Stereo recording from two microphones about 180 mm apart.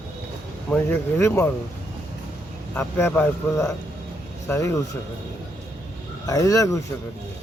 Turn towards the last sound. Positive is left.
turn(degrees=15)  # may be behind; listen again after turning